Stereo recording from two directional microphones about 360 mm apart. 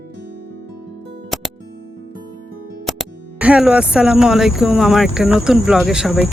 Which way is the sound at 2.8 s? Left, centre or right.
Centre.